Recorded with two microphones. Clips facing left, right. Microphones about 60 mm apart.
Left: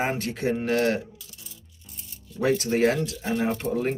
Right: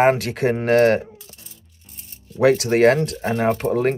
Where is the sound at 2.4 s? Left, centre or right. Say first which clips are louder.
Right 7 dB; right.